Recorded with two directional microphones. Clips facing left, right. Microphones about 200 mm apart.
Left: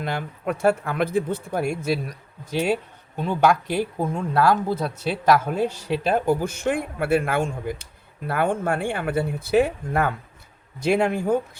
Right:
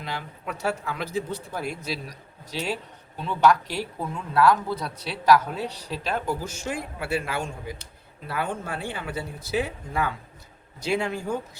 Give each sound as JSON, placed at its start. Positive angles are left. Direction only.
{"t": 0.0, "sound": "speech", "side_deg": 55}